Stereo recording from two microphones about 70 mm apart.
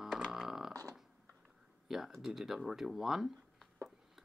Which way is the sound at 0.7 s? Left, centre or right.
Right.